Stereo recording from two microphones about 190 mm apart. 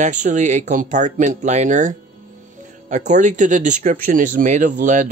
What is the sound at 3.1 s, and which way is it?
Speech, 40° right (ahead or behind).